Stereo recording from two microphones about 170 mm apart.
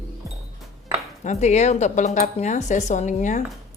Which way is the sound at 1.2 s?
45° left (ahead or behind).